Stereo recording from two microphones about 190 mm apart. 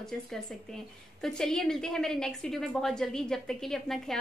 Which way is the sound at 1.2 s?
Centre (ahead or behind).